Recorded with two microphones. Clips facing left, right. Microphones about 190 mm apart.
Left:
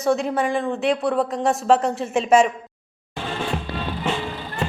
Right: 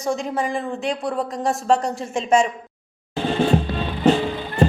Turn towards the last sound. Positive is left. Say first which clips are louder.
# right 5 dB
turn(degrees=-35)  # may be behind; listen again after turning